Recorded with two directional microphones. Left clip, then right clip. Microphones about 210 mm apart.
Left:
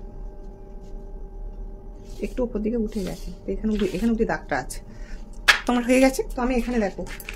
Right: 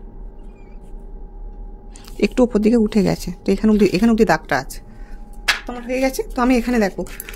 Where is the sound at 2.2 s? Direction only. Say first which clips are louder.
Right 11 dB; 45° right (ahead or behind).